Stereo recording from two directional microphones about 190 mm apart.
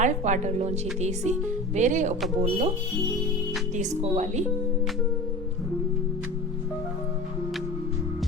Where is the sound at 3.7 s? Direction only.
35° right (ahead or behind).